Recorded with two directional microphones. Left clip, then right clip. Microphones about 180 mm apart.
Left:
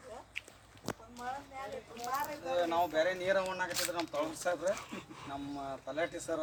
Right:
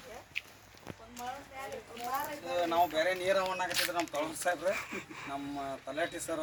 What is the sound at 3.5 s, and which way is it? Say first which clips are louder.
Speech: right 3 dB; 15° left (ahead or behind).